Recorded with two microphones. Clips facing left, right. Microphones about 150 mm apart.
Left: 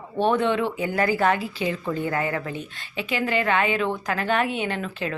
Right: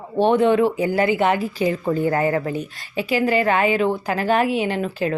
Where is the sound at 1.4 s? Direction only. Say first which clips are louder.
Right 6 dB; 40° right (ahead or behind).